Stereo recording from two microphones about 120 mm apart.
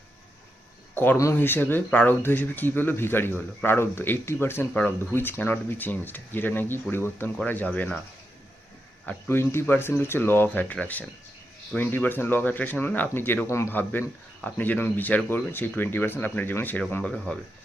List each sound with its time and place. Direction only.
1.2 s speech: 20° left (ahead or behind)
9.0 s speech: 15° left (ahead or behind)
17.0 s speech: 5° left (ahead or behind)